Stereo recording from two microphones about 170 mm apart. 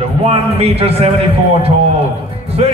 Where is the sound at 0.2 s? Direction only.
35° right (ahead or behind).